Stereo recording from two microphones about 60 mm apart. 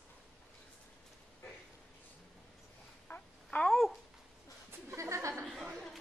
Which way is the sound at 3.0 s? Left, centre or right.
Left.